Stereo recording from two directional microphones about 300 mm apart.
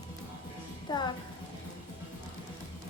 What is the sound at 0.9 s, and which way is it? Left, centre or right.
Music, centre.